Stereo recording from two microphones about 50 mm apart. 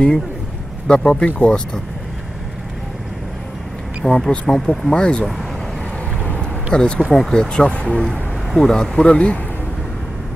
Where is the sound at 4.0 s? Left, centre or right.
Centre.